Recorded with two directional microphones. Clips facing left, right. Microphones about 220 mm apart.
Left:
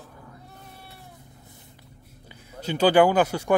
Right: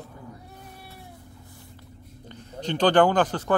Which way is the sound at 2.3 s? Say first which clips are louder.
Right 1 dB; 10° left (ahead or behind).